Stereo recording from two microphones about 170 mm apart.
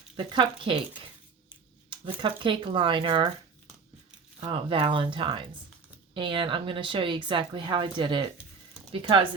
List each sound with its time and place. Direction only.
0.2 s speech: 25° right (ahead or behind)
4.4 s speech: 30° right (ahead or behind)